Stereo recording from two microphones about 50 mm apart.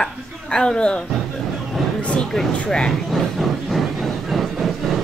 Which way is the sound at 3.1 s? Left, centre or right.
Centre.